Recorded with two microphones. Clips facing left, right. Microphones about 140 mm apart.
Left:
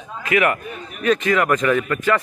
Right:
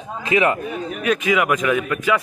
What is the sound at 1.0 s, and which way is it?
A man's voice, 5° right (ahead or behind).